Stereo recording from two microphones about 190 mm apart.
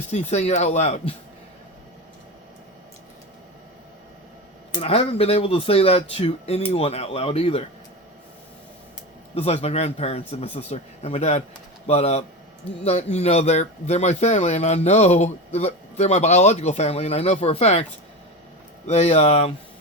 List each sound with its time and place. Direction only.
0.3 s speech: 35° left (ahead or behind)
4.7 s speech: 30° left (ahead or behind)
9.3 s speech: 35° left (ahead or behind)
18.9 s speech: 35° left (ahead or behind)